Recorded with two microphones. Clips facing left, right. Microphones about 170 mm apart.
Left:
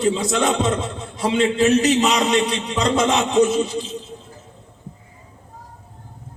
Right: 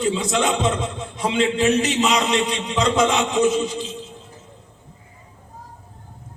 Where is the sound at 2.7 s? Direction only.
35° left (ahead or behind).